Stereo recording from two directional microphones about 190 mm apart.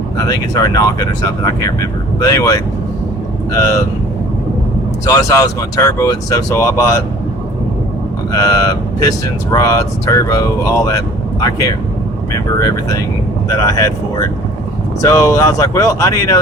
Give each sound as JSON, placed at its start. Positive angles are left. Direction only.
{"t": 0.2, "sound": "speech", "side_deg": 20}
{"t": 5.0, "sound": "speech", "side_deg": 15}
{"t": 8.3, "sound": "speech", "side_deg": 20}